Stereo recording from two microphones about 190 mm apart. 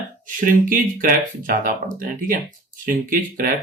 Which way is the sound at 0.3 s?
45° right (ahead or behind).